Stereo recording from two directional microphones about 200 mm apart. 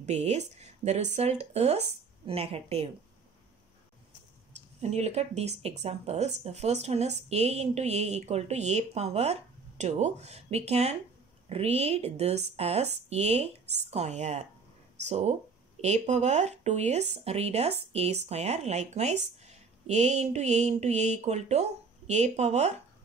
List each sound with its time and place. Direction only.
0.0 s speech: 35° right (ahead or behind)
4.8 s speech: 35° right (ahead or behind)
19.4 s a sound: 35° right (ahead or behind)